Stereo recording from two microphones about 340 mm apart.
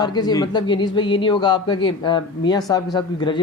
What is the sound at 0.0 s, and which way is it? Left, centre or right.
A man's voice, centre.